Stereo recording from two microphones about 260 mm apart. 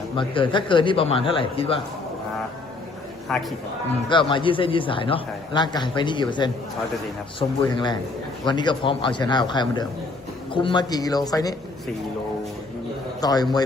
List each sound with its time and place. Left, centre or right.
0.2 s a man's voice: centre
3.3 s a man's voice: centre
4.1 s a man's voice: centre
7.6 s a man's voice: centre
13.2 s a man's voice: centre